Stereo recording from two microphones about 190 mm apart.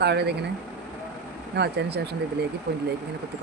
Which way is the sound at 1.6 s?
60° right (ahead or behind).